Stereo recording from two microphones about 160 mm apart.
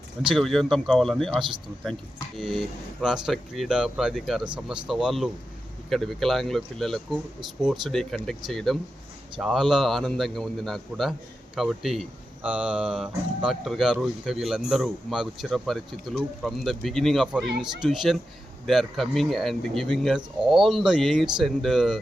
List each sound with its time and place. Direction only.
0.3 s speech: centre (ahead or behind)
1.4 s speech: 30° right (ahead or behind)
1.8 s speech: centre (ahead or behind)